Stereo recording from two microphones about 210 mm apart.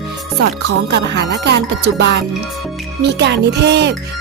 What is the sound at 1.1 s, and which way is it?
Music, 55° right (ahead or behind).